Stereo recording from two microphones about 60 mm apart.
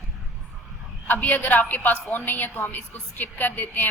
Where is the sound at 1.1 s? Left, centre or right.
Left.